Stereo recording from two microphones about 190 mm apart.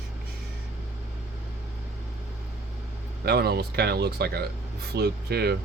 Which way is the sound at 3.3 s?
55° right (ahead or behind).